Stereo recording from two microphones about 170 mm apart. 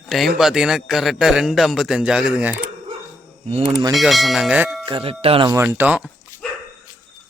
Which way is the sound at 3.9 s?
Centre (ahead or behind).